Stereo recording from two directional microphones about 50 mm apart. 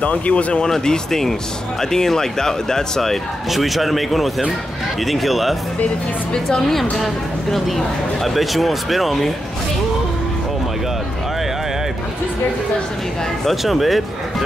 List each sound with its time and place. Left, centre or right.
0.0 s speech: left
0.7 s speech: centre
6.3 s speech: centre
13.5 s speech: centre